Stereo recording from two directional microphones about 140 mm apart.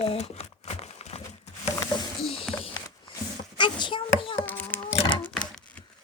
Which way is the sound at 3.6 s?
35° left (ahead or behind).